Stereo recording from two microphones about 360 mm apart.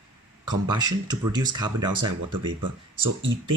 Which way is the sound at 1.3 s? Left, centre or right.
Centre.